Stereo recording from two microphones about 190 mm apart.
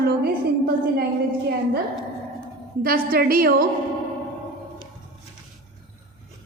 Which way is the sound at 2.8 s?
50° right (ahead or behind).